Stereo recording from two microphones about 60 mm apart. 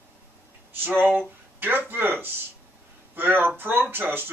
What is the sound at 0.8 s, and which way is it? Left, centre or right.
Speech, right.